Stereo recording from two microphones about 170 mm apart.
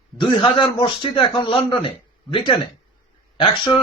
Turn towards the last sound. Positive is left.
turn(degrees=25)  # may be behind; listen again after turning